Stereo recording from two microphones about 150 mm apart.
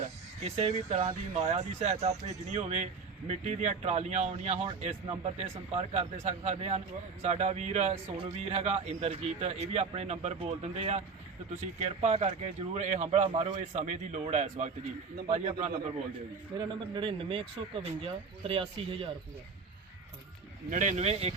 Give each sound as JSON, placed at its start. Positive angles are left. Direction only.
{"t": 0.4, "sound": "speech", "side_deg": -45}
{"t": 10.3, "sound": "speech", "side_deg": -35}
{"t": 16.6, "sound": "speech", "side_deg": -35}
{"t": 20.7, "sound": "speech", "side_deg": -55}